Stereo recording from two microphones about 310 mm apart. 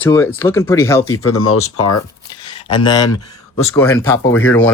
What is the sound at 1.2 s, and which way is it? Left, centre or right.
Speech, left.